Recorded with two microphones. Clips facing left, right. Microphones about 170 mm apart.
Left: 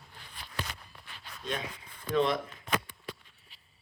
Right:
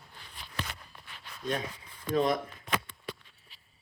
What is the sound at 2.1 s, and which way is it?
Speech, 45° right (ahead or behind).